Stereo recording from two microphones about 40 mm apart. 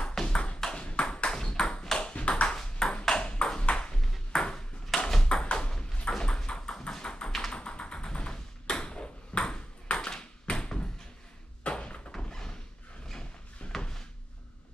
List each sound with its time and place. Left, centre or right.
0.3 s ping: left
2.5 s ping: centre
10.4 s cupboard open or close: left
11.6 s tap: left
12.1 s a sound: centre
13.7 s drawer open or close: centre